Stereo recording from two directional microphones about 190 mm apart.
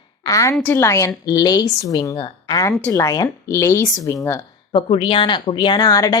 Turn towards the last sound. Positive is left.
turn(degrees=20)  # may be behind; listen again after turning